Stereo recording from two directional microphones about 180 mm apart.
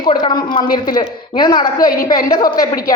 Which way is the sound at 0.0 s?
25° left (ahead or behind).